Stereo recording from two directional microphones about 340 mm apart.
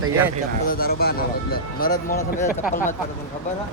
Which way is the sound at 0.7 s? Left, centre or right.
Left.